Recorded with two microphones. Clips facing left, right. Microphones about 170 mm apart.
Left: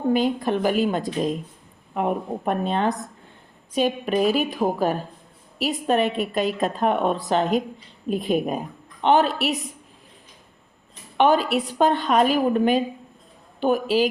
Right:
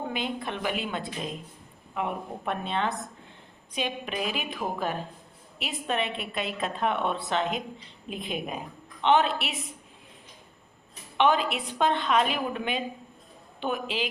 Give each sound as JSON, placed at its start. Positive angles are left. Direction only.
{"t": 0.1, "sound": "a woman's voice", "side_deg": 40}
{"t": 11.2, "sound": "a woman's voice", "side_deg": 40}